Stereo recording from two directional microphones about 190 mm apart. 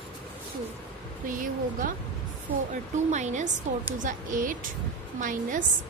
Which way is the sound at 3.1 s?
40° right (ahead or behind).